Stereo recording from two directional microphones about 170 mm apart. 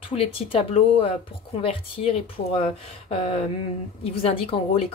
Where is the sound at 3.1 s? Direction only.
35° left (ahead or behind).